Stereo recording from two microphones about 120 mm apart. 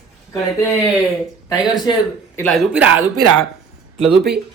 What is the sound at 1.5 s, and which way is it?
Speech, 30° left (ahead or behind).